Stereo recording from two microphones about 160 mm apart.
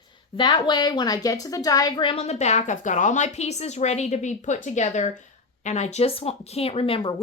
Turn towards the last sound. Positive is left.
turn(degrees=35)  # may be behind; listen again after turning